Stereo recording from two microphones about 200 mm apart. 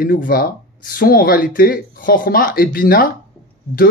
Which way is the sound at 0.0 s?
45° left (ahead or behind).